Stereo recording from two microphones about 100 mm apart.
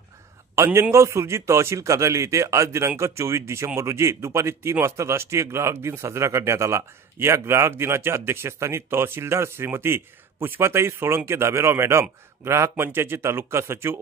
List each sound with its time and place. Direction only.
0.7 s speech: 20° right (ahead or behind)
0.9 s speech: 30° right (ahead or behind)